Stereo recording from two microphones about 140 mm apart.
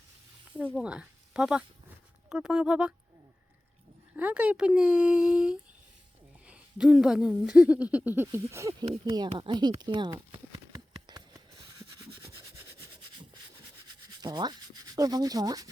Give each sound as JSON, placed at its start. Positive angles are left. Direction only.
{"t": 0.8, "sound": "speech", "side_deg": -5}
{"t": 4.1, "sound": "speech", "side_deg": -10}
{"t": 6.4, "sound": "a sound", "side_deg": -5}
{"t": 7.4, "sound": "speech", "side_deg": -5}
{"t": 8.8, "sound": "speech", "side_deg": -35}
{"t": 10.3, "sound": "a sound", "side_deg": -30}
{"t": 14.2, "sound": "sanding", "side_deg": -30}